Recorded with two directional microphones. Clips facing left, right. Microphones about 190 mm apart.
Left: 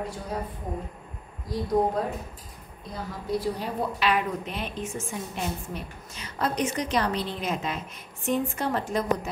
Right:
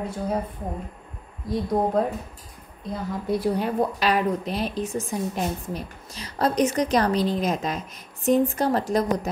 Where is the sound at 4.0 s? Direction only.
35° right (ahead or behind).